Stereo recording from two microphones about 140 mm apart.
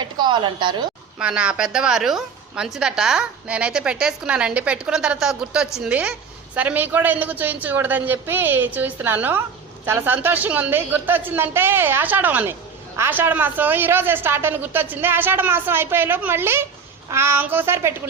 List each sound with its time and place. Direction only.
0.0 s speech: 35° right (ahead or behind)
1.2 s a woman's voice: 5° right (ahead or behind)